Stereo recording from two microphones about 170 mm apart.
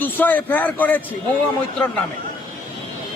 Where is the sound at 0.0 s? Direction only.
10° left (ahead or behind).